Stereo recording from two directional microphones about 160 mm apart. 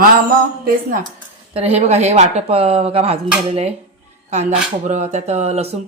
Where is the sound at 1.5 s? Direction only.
40° right (ahead or behind).